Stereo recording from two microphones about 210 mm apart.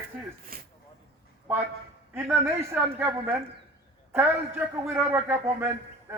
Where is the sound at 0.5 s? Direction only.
45° right (ahead or behind).